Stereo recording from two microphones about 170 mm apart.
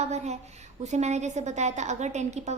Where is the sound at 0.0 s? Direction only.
40° right (ahead or behind).